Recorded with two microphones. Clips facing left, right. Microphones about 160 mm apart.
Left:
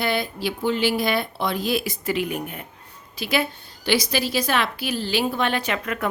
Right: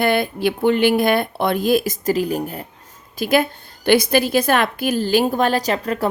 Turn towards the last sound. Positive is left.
turn(degrees=-35)  # may be behind; listen again after turning